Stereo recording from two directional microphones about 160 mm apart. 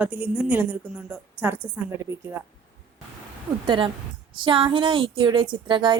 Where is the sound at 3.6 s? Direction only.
30° right (ahead or behind).